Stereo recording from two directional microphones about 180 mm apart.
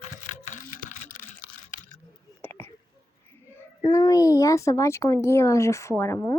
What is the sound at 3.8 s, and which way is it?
Speech, 25° left (ahead or behind).